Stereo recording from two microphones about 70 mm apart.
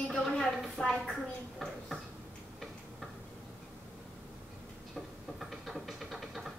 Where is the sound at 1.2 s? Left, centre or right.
Centre.